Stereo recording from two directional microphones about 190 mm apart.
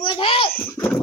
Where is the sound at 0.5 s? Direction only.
10° left (ahead or behind).